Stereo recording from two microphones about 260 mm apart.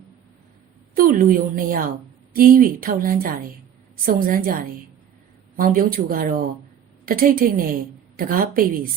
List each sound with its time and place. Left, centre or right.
0.9 s a woman's voice: right